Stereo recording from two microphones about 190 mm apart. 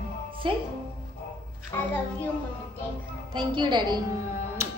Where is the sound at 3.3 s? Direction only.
25° right (ahead or behind).